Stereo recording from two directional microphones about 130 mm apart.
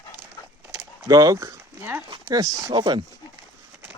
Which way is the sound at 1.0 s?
25° right (ahead or behind).